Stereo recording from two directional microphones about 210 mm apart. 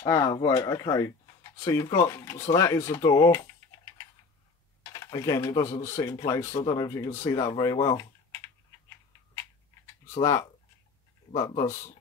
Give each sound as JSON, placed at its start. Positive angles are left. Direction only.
{"t": 0.0, "sound": "speech", "side_deg": 20}
{"t": 4.9, "sound": "speech", "side_deg": 15}
{"t": 10.2, "sound": "speech", "side_deg": 15}